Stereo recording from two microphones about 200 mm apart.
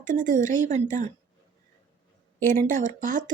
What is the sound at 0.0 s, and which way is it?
Speech, 40° right (ahead or behind).